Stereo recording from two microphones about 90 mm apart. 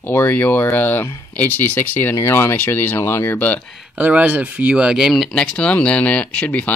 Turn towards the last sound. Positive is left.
turn(degrees=15)  # may be behind; listen again after turning